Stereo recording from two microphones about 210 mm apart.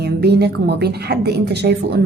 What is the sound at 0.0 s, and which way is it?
Speech, 50° right (ahead or behind).